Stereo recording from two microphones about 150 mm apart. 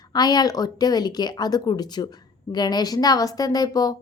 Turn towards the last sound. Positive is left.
turn(degrees=25)  # may be behind; listen again after turning